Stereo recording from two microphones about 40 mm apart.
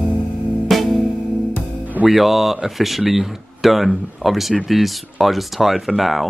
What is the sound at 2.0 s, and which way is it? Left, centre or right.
Speech, centre.